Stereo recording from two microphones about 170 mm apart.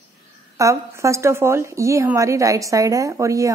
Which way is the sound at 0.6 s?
20° right (ahead or behind).